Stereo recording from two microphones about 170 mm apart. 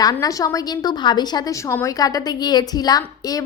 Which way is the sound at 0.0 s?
20° left (ahead or behind).